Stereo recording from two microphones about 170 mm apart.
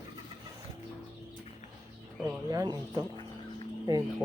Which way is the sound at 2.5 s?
20° right (ahead or behind).